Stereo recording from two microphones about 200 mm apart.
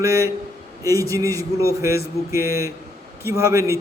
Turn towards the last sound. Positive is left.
turn(degrees=-15)  # may be behind; listen again after turning